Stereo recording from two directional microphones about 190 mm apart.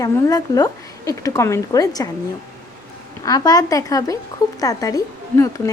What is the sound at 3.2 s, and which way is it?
Speech, 20° left (ahead or behind).